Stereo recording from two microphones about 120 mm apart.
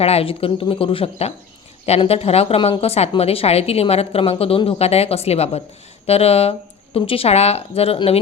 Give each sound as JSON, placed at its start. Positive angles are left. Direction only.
{"t": 0.0, "sound": "speech", "side_deg": 55}